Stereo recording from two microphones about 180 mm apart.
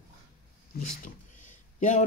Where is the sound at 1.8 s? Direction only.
45° left (ahead or behind).